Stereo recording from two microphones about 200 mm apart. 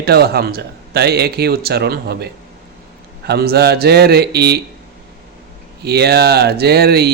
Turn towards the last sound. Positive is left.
turn(degrees=-55)  # may be behind; listen again after turning